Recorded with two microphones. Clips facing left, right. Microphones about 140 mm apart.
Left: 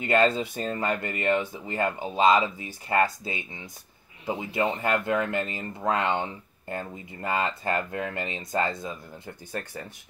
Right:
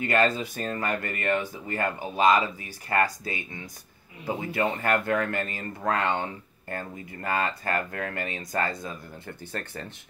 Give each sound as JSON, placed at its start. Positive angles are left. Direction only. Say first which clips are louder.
{"t": 0.0, "sound": "speech", "louder": "left 2 dB", "side_deg": 25}